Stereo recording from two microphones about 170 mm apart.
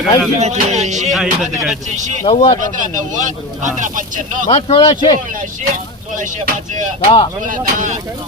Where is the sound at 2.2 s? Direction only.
35° left (ahead or behind).